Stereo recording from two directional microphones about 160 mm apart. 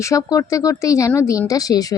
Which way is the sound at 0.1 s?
20° left (ahead or behind).